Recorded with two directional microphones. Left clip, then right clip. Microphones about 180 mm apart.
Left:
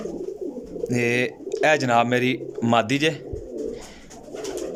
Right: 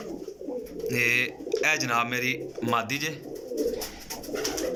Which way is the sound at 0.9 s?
60° left (ahead or behind).